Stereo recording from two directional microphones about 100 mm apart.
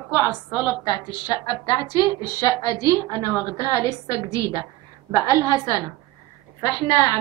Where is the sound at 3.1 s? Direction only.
25° left (ahead or behind).